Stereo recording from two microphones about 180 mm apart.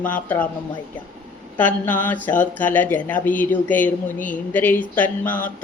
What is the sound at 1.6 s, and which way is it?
A woman's voice, 10° left (ahead or behind).